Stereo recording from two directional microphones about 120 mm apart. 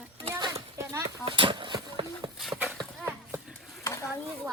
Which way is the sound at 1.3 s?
45° right (ahead or behind).